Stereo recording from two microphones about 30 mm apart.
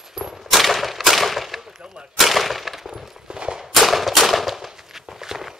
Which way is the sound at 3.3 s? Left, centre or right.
Right.